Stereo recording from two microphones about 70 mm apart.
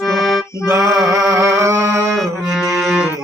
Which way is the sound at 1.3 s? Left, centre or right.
Right.